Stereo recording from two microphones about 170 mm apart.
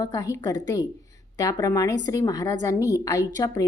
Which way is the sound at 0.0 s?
20° left (ahead or behind).